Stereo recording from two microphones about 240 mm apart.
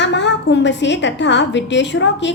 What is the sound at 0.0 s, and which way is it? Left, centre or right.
A woman's voice, left.